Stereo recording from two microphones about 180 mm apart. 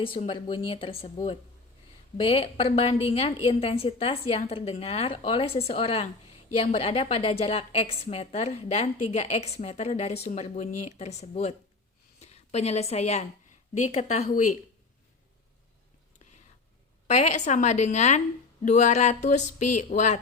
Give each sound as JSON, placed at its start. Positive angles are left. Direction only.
{"t": 0.0, "sound": "a woman's voice", "side_deg": 30}
{"t": 17.1, "sound": "a woman's voice", "side_deg": 40}